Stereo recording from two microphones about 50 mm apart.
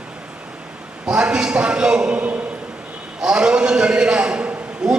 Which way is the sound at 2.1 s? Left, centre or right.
Right.